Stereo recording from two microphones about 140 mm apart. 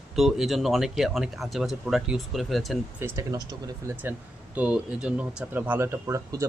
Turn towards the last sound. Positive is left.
turn(degrees=-20)  # may be behind; listen again after turning